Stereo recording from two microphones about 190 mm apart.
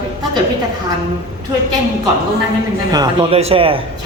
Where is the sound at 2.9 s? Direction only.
20° right (ahead or behind).